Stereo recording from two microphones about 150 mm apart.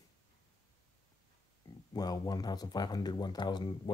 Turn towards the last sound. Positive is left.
turn(degrees=30)  # may be behind; listen again after turning